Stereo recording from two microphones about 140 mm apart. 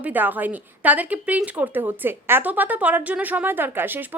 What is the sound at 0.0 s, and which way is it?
A woman's voice, 15° right (ahead or behind).